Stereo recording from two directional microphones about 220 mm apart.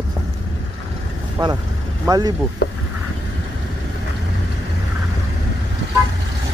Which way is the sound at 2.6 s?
45° left (ahead or behind).